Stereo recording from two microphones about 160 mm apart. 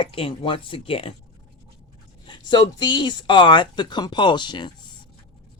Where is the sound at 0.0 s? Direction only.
35° left (ahead or behind).